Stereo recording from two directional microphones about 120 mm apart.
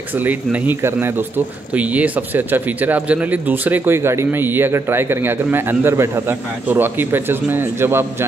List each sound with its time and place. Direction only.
0.2 s speech: 15° right (ahead or behind)